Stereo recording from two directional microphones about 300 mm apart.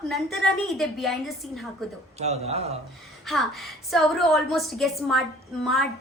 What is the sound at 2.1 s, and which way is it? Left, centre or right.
Speech, right.